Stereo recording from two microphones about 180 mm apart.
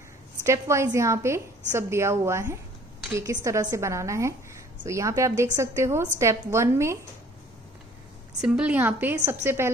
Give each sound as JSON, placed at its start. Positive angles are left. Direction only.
{"t": 0.5, "sound": "a woman's voice", "side_deg": -15}
{"t": 8.4, "sound": "a woman's voice", "side_deg": -5}